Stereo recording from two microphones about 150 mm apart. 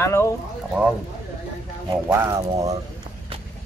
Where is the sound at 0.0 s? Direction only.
20° left (ahead or behind).